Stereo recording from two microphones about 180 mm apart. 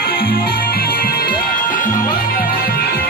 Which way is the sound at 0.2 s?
55° left (ahead or behind).